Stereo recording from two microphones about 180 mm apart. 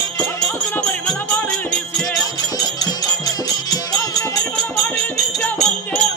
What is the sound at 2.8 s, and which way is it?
Music, 20° left (ahead or behind).